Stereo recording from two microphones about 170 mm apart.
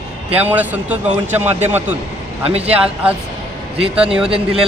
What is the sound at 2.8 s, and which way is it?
A man's voice, 10° right (ahead or behind).